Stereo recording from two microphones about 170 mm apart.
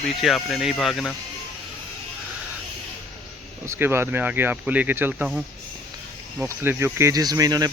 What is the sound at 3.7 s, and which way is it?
Speech, 15° right (ahead or behind).